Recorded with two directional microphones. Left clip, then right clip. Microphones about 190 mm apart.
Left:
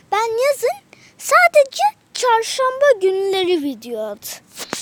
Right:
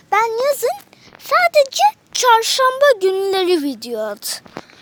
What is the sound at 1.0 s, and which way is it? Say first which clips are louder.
Speech: left 2 dB; 25° left (ahead or behind).